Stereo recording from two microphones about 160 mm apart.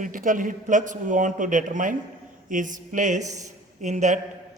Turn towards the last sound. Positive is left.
turn(degrees=-50)  # may be behind; listen again after turning